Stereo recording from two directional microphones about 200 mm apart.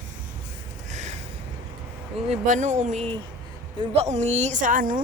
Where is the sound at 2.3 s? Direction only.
40° right (ahead or behind).